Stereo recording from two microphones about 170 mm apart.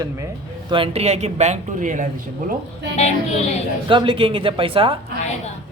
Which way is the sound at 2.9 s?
40° left (ahead or behind).